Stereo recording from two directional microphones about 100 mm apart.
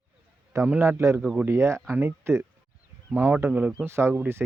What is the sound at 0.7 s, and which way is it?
Speech, 25° right (ahead or behind).